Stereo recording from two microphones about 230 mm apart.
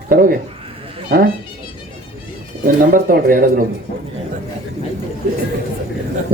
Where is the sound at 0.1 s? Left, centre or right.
Right.